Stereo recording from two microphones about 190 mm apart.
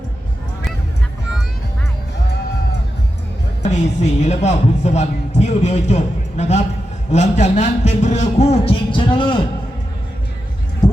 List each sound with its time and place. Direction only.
3.6 s a man's voice: 35° left (ahead or behind)